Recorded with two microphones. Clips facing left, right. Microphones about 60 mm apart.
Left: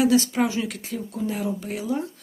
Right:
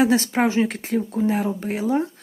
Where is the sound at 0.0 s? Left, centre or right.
Right.